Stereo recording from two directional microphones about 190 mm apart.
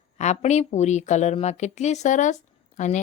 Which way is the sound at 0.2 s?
35° left (ahead or behind).